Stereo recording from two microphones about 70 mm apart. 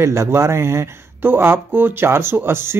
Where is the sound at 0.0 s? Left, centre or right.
Right.